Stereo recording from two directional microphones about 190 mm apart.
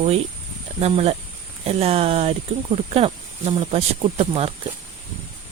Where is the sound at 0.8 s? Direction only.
30° right (ahead or behind).